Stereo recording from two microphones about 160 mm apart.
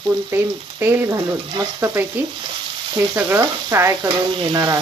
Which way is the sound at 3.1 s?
15° right (ahead or behind).